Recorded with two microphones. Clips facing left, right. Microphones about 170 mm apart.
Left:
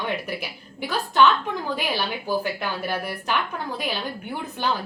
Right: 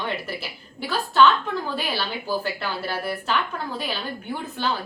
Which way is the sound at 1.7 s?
15° left (ahead or behind).